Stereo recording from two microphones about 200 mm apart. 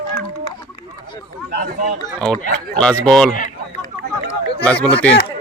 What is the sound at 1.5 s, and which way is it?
Speech, 50° right (ahead or behind).